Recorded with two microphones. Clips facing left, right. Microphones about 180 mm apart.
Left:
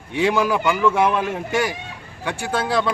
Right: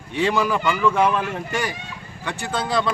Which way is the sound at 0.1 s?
15° left (ahead or behind).